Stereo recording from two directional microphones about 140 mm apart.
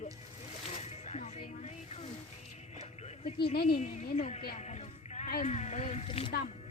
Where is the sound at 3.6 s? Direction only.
45° left (ahead or behind).